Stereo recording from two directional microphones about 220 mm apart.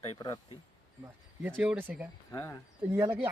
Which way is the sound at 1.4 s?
10° right (ahead or behind).